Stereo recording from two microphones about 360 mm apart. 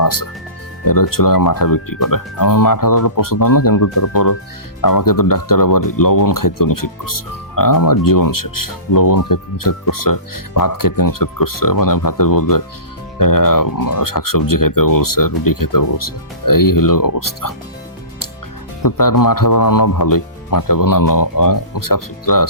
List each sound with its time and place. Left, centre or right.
0.0 s speech: left
18.8 s speech: left